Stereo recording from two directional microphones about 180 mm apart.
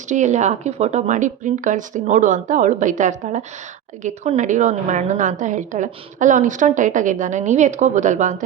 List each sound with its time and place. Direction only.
0.1 s a woman's voice: 40° right (ahead or behind)